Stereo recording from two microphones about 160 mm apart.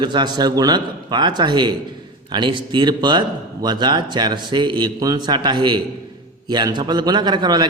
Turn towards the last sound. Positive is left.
turn(degrees=-25)  # may be behind; listen again after turning